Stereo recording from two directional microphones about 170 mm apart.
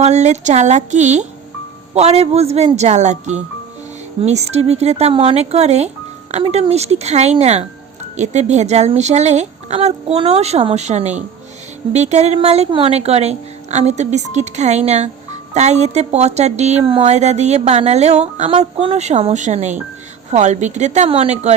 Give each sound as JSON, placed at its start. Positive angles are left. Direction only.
{"t": 0.0, "sound": "a woman's voice", "side_deg": -40}